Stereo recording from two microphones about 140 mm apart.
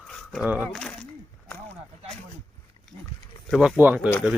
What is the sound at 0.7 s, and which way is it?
Speech, 5° left (ahead or behind).